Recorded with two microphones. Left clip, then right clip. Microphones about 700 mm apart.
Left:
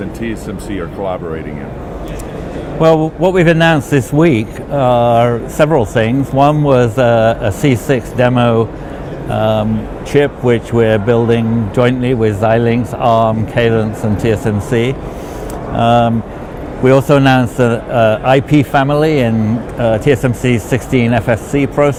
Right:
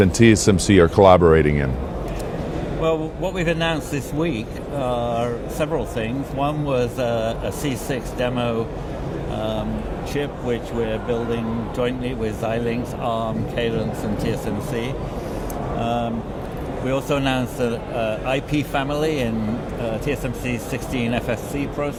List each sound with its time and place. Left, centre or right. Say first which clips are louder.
0.2 s speech: right 7 dB; right
2.8 s a man's voice: left 13 dB; left